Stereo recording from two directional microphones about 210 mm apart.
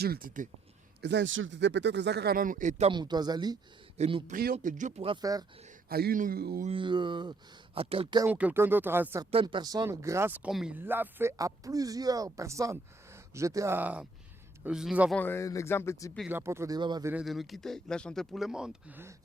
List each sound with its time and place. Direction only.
0.0 s speech: 45° right (ahead or behind)
1.0 s speech: 60° right (ahead or behind); by 3.6 s 20° right (ahead or behind)
3.9 s speech: 30° right (ahead or behind)
5.9 s speech: 45° right (ahead or behind)
6.7 s speech: 25° right (ahead or behind)
8.2 s speech: 5° right (ahead or behind)
9.3 s speech: 25° right (ahead or behind); by 15.1 s 5° right (ahead or behind)
15.1 s speech: 10° left (ahead or behind)
16.3 s speech: 10° right (ahead or behind)
17.2 s speech: centre (ahead or behind)